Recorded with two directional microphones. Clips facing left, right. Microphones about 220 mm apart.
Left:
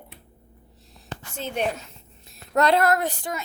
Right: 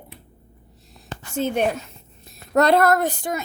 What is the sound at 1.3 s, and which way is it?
A woman's voice, 50° right (ahead or behind).